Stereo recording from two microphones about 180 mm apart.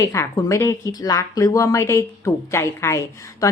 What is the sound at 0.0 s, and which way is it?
Speech, 15° left (ahead or behind).